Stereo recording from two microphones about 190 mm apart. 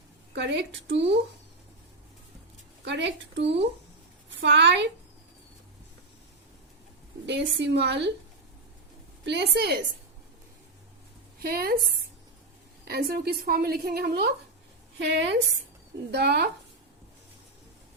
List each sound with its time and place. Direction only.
0.3 s speech: 65° right (ahead or behind)
2.8 s a woman's voice: 65° right (ahead or behind)
7.3 s speech: 65° right (ahead or behind)
9.2 s speech: 65° right (ahead or behind)
11.3 s a woman's voice: 50° right (ahead or behind)
12.9 s a woman's voice: 50° right (ahead or behind)